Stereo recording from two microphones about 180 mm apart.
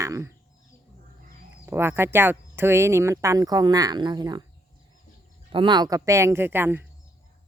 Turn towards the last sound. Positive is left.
turn(degrees=-10)  # may be behind; listen again after turning